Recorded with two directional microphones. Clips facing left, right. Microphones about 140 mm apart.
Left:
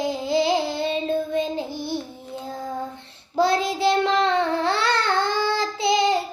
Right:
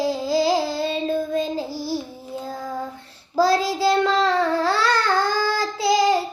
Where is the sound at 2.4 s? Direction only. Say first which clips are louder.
Even; 25° left (ahead or behind).